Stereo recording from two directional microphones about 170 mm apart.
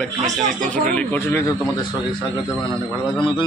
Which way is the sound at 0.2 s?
50° right (ahead or behind).